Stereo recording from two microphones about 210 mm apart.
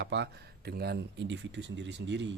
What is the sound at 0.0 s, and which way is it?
Speech, 55° right (ahead or behind).